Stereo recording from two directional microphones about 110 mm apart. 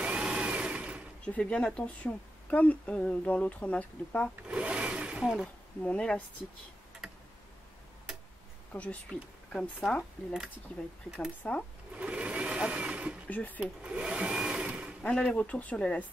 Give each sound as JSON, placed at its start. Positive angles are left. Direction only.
{"t": 0.0, "sound": "sewing machine", "side_deg": -10}
{"t": 1.2, "sound": "a woman's voice", "side_deg": 10}
{"t": 4.5, "sound": "a sound", "side_deg": -10}
{"t": 5.8, "sound": "a woman's voice", "side_deg": 10}
{"t": 8.7, "sound": "a woman's voice", "side_deg": 10}
{"t": 12.0, "sound": "sewing machine", "side_deg": -10}
{"t": 13.3, "sound": "a woman's voice", "side_deg": 15}
{"t": 13.6, "sound": "a sound", "side_deg": -10}
{"t": 15.0, "sound": "a woman's voice", "side_deg": 5}